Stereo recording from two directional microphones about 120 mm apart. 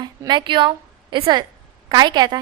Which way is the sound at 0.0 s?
35° right (ahead or behind).